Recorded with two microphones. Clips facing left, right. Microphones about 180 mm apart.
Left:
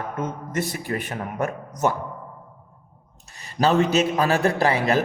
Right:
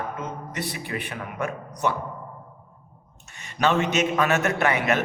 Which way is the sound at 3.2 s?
35° left (ahead or behind).